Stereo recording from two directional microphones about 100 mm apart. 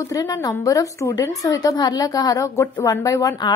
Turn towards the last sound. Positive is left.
turn(degrees=40)  # may be behind; listen again after turning